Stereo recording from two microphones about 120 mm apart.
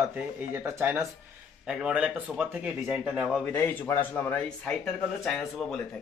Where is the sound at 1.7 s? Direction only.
10° right (ahead or behind).